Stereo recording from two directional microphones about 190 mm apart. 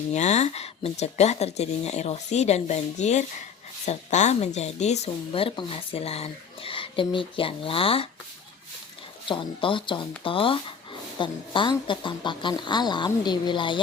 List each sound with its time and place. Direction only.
0.1 s speech: 35° left (ahead or behind)
9.2 s speech: 25° left (ahead or behind)